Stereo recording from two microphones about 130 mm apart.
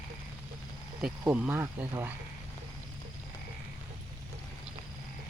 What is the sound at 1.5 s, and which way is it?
Speech, 20° right (ahead or behind).